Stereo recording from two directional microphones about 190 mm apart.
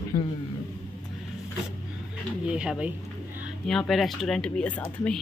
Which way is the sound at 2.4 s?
5° right (ahead or behind).